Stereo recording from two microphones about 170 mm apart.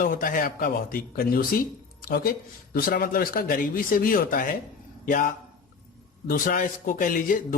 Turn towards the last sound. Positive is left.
turn(degrees=55)  # may be behind; listen again after turning